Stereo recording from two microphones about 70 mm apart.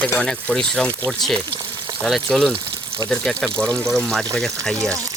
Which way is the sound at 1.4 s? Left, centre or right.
Right.